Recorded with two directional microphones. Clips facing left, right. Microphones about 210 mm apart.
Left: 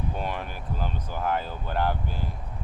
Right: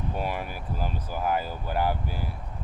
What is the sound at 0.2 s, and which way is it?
Speech, 10° right (ahead or behind).